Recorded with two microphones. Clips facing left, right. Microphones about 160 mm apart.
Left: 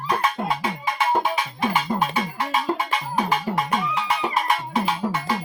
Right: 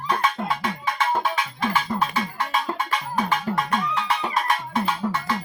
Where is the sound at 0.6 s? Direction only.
15° left (ahead or behind).